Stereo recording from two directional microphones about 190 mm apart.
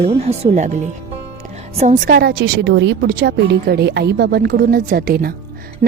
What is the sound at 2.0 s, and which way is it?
A woman's voice, 55° right (ahead or behind).